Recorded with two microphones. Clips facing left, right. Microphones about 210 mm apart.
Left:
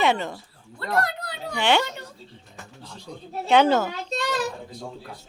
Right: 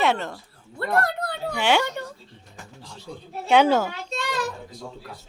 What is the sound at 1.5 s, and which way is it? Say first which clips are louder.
Speech: even; 10° right (ahead or behind).